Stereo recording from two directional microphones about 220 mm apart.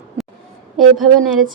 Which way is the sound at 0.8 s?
Centre (ahead or behind).